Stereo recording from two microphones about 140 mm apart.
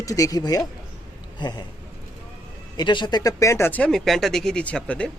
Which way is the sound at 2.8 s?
35° left (ahead or behind).